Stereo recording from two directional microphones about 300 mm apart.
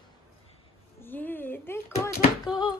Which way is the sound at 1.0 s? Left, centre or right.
Centre.